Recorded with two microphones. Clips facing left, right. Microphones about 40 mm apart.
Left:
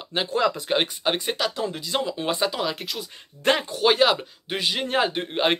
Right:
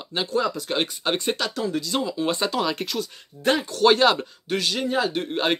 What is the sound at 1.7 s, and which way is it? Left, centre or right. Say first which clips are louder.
Speech: right 1 dB; left.